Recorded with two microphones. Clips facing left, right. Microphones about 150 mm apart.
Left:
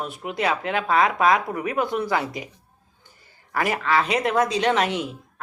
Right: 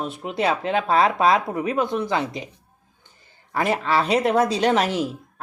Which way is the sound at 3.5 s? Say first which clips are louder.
Right 1 dB; 30° right (ahead or behind).